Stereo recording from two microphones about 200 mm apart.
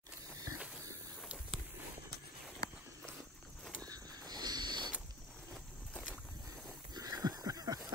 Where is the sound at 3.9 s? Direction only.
20° right (ahead or behind).